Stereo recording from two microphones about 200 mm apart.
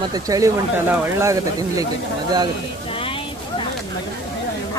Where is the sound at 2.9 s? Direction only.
25° left (ahead or behind).